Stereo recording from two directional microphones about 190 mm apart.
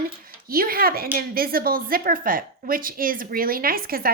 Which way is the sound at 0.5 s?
50° right (ahead or behind).